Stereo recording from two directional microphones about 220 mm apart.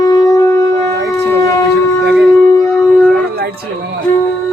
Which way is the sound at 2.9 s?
Centre (ahead or behind).